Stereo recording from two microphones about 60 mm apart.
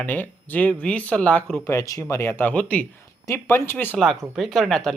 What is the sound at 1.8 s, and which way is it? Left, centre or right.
Speech, left.